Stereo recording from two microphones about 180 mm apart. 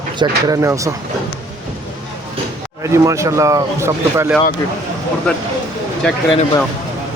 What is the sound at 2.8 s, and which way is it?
Speech, 15° right (ahead or behind).